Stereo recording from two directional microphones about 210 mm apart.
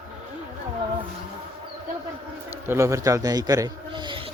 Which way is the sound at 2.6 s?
10° right (ahead or behind).